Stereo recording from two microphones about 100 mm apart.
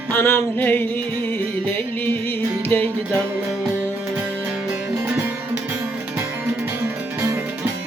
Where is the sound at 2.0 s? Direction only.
20° left (ahead or behind).